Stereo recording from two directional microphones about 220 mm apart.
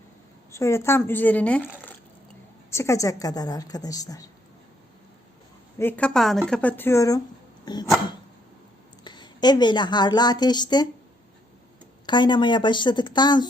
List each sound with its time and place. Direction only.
0.5 s a woman's voice: 15° left (ahead or behind)
5.8 s a woman's voice: 5° left (ahead or behind)
7.6 s dog: 20° left (ahead or behind)
9.0 s a woman's voice: 20° left (ahead or behind)
12.0 s a woman's voice: 20° left (ahead or behind)